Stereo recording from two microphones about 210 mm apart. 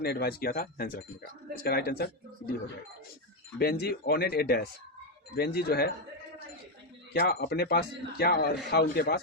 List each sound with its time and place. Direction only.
0.0 s speech: 45° left (ahead or behind)
3.6 s speech: 50° left (ahead or behind)
7.1 s speech: 50° left (ahead or behind)